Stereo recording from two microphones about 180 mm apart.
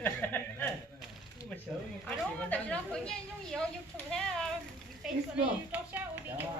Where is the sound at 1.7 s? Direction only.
Centre (ahead or behind).